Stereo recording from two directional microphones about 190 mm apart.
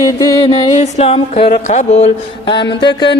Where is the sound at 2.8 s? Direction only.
25° left (ahead or behind).